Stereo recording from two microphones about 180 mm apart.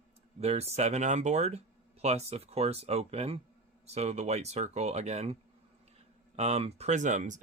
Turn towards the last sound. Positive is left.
turn(degrees=-45)  # may be behind; listen again after turning